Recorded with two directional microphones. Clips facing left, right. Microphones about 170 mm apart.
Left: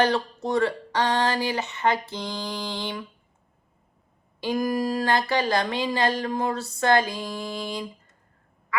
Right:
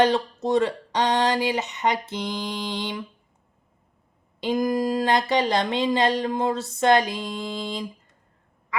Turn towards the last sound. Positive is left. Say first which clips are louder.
# right 1 dB
turn(degrees=-20)  # may be behind; listen again after turning